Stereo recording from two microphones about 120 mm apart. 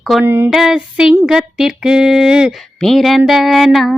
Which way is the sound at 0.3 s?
20° right (ahead or behind).